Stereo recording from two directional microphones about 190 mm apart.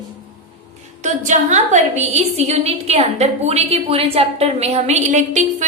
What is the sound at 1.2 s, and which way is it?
A woman's voice, 40° right (ahead or behind).